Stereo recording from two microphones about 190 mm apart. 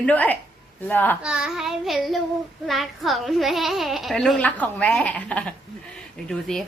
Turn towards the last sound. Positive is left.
turn(degrees=5)  # may be behind; listen again after turning